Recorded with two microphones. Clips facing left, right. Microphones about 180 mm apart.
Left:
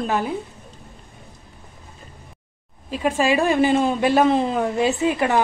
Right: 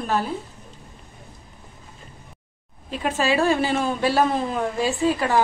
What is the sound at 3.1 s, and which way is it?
A woman's voice, 15° left (ahead or behind).